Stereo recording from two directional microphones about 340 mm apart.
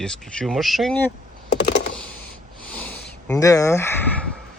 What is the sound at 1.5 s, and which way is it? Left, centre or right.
Computer keyboard, left.